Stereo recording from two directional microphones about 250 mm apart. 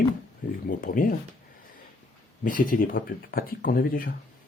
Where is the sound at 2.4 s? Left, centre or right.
Left.